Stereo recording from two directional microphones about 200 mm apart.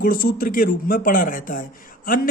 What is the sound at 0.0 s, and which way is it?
Speech, 45° left (ahead or behind).